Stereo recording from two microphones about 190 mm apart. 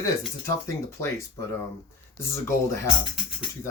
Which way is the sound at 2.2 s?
15° left (ahead or behind).